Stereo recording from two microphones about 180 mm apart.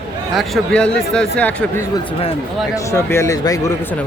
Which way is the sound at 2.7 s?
15° left (ahead or behind).